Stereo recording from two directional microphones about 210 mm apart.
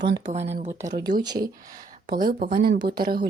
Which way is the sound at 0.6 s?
15° right (ahead or behind).